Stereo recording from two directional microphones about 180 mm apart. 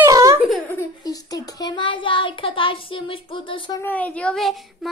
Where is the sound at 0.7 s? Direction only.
15° left (ahead or behind).